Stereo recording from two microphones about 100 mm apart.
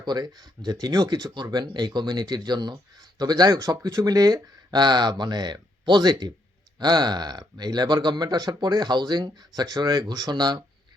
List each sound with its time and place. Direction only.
0.0 s speech: 45° right (ahead or behind)